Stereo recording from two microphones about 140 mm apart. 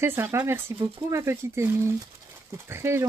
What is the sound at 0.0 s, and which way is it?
Speech, 15° right (ahead or behind).